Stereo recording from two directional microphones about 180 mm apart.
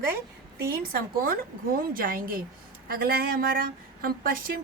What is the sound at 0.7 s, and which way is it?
A woman's voice, 55° right (ahead or behind).